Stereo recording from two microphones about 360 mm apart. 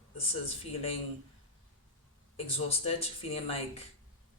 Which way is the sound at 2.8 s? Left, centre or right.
Centre.